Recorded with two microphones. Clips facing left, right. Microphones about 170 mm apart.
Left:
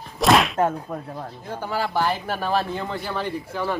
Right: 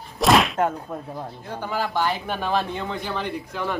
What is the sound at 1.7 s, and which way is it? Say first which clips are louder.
Speech: left 1 dB; 10° left (ahead or behind).